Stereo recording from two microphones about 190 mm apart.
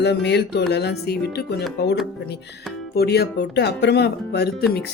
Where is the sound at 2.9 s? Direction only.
55° left (ahead or behind).